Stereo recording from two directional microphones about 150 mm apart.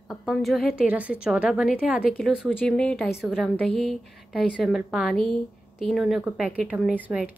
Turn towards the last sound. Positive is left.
turn(degrees=-10)  # may be behind; listen again after turning